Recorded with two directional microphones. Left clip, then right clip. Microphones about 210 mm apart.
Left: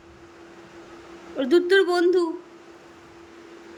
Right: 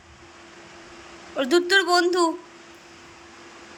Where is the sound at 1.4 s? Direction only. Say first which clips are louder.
Left 1 dB; 10° left (ahead or behind).